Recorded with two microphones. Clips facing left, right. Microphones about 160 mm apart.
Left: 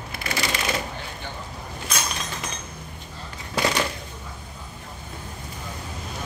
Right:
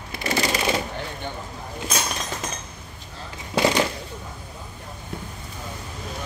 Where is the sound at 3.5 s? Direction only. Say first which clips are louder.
Right 4 dB; 25° right (ahead or behind).